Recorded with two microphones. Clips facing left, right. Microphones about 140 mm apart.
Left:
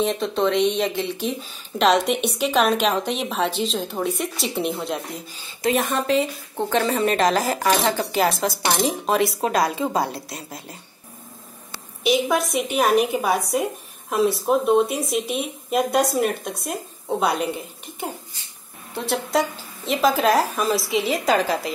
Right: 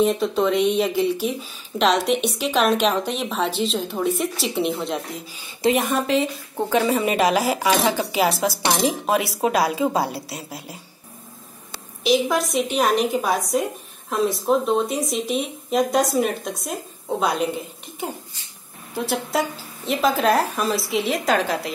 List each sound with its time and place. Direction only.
0.0 s speech: 5° right (ahead or behind)
5.6 s speech: 20° right (ahead or behind)
5.9 s speech: centre (ahead or behind)
12.0 s speech: centre (ahead or behind)